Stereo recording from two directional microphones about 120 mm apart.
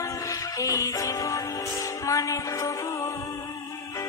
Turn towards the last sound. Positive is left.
turn(degrees=25)  # may be behind; listen again after turning